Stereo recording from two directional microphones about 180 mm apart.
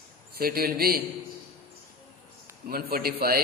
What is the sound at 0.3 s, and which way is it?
Speech, 55° right (ahead or behind).